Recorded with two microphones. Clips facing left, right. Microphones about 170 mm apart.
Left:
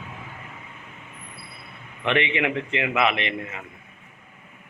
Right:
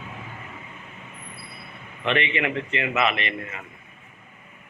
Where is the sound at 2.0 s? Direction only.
15° left (ahead or behind).